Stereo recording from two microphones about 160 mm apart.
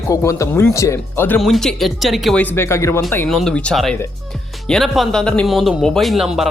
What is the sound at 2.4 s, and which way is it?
Speech, 15° left (ahead or behind).